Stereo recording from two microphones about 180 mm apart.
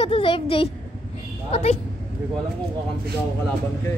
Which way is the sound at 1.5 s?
35° left (ahead or behind).